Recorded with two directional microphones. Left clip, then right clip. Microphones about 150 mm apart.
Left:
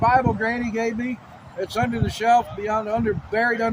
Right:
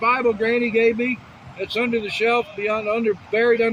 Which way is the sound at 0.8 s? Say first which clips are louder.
Right 7 dB; 20° left (ahead or behind).